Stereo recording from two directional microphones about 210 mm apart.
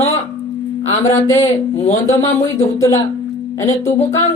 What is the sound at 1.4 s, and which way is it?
Speech, 30° left (ahead or behind).